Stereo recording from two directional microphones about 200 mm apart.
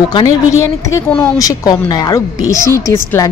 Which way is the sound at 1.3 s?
20° left (ahead or behind).